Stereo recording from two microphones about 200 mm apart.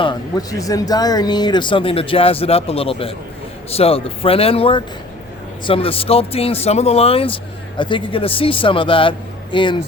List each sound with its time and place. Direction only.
0.0 s speech: 20° left (ahead or behind)